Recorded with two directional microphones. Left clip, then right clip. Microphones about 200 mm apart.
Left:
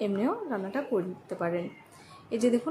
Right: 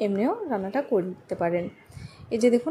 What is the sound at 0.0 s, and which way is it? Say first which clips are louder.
A woman's voice: right 4 dB; 15° right (ahead or behind).